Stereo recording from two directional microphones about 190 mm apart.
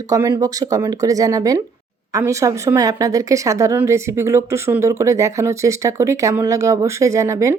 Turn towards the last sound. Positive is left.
turn(degrees=-15)  # may be behind; listen again after turning